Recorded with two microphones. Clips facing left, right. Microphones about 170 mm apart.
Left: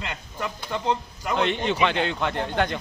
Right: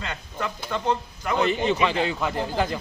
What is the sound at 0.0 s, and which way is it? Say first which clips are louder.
Speech: right 1 dB; 15° left (ahead or behind).